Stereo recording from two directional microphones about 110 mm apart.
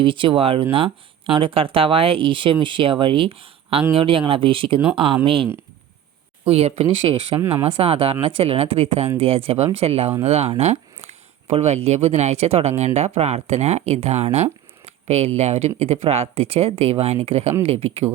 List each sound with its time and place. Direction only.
0.0 s speech: 50° right (ahead or behind)
6.4 s speech: 65° right (ahead or behind)